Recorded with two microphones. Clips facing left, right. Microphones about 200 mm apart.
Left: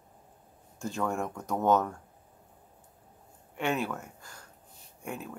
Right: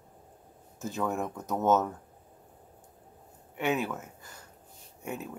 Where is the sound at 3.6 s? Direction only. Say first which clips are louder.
Right 1 dB; 5° right (ahead or behind).